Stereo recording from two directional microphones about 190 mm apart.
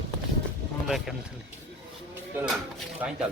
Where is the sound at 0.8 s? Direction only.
Centre (ahead or behind).